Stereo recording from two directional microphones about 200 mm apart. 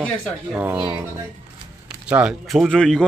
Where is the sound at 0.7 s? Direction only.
25° right (ahead or behind).